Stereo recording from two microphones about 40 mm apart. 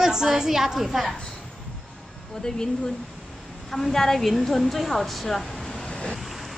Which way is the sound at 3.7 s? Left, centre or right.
Centre.